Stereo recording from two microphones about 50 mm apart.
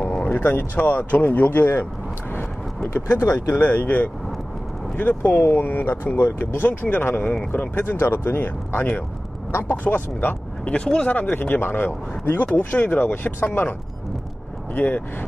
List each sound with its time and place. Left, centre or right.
0.2 s vehicle: left
0.7 s speech: left
3.2 s speech: left
3.5 s speech: left
10.6 s speech: left
11.1 s speech: left